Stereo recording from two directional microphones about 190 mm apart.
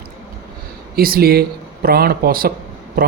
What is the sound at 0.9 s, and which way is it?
Speech, 50° right (ahead or behind).